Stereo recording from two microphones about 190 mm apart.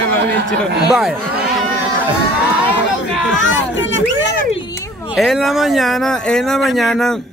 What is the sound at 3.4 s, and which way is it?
Speech, 80° left.